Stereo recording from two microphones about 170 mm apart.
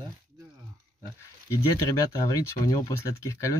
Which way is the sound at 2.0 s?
20° left (ahead or behind).